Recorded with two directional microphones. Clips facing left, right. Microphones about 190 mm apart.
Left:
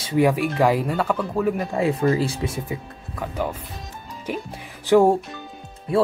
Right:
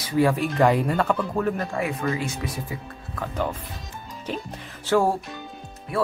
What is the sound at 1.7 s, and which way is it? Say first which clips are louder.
Speech: left 6 dB; 30° left (ahead or behind).